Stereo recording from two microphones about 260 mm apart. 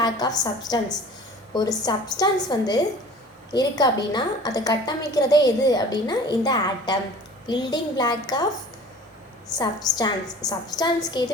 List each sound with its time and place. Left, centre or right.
0.0 s a woman's voice: centre
9.6 s a woman's voice: centre